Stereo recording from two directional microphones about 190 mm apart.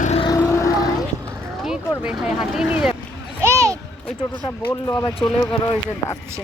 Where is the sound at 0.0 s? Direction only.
35° left (ahead or behind).